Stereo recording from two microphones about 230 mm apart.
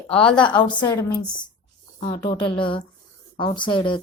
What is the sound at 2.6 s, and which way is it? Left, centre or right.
A woman's voice, left.